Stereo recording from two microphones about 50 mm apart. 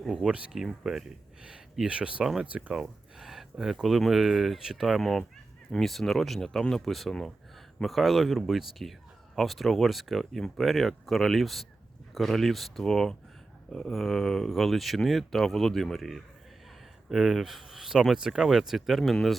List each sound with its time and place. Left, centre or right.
0.3 s speech: right
2.8 s speech: centre
4.9 s speech: centre
7.9 s speech: centre